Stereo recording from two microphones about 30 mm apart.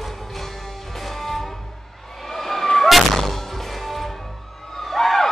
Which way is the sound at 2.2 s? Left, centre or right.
Centre.